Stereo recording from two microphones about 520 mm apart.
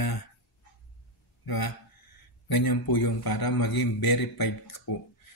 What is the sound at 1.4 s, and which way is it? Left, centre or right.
Speech, left.